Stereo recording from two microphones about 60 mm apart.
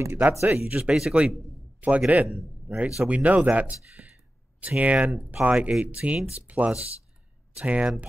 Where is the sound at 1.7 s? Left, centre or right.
Right.